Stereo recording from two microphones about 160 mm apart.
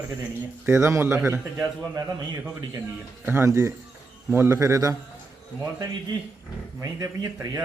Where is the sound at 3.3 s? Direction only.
15° right (ahead or behind).